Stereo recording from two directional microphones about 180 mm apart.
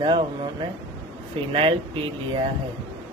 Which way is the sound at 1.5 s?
30° right (ahead or behind).